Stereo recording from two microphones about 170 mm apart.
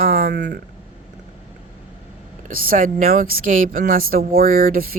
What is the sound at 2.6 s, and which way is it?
Speech, 55° right (ahead or behind).